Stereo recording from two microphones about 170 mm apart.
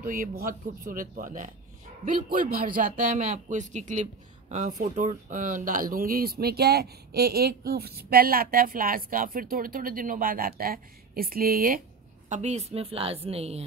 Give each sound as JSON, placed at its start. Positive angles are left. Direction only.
{"t": 0.0, "sound": "speech", "side_deg": -55}
{"t": 12.3, "sound": "a woman's voice", "side_deg": -40}